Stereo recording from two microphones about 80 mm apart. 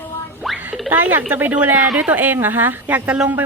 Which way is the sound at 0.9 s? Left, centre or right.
Right.